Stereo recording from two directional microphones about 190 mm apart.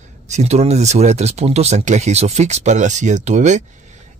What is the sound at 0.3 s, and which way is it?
Speech, 35° right (ahead or behind).